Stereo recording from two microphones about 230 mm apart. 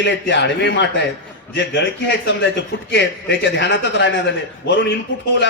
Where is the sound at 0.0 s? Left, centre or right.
Left.